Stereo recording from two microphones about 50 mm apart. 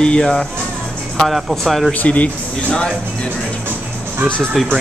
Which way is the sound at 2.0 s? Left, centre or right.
Left.